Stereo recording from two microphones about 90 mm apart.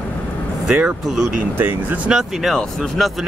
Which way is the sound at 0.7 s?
10° right (ahead or behind).